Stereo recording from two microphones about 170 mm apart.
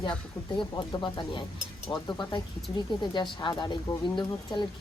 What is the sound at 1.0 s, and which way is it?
Speech, 30° left (ahead or behind).